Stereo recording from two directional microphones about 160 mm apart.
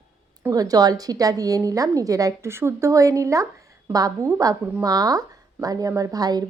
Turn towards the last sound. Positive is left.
turn(degrees=-25)  # may be behind; listen again after turning